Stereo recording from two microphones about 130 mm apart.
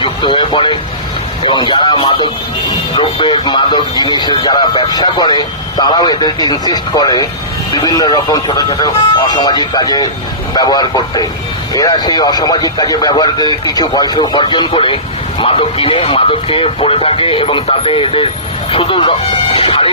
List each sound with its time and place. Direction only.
0.0 s speech: 40° left (ahead or behind)